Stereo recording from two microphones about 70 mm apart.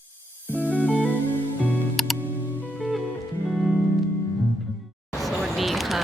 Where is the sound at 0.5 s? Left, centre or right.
Left.